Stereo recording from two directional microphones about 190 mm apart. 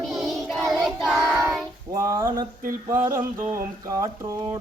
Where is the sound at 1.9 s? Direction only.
15° right (ahead or behind).